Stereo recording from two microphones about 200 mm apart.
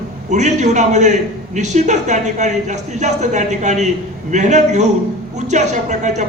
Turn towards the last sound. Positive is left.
turn(degrees=-35)  # may be behind; listen again after turning